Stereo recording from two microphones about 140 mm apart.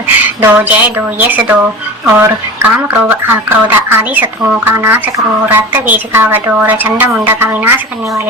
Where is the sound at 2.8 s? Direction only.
15° right (ahead or behind).